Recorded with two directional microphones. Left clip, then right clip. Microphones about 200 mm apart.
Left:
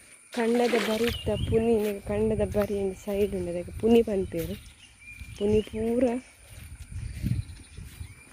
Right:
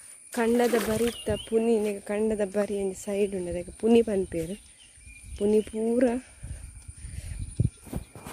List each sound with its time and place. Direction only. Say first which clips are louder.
0.3 s speech: right 1 dB; 15° right (ahead or behind)
5.4 s speech: right 1 dB; 20° right (ahead or behind)